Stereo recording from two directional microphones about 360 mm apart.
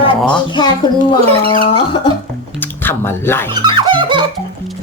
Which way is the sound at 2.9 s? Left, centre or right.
Centre.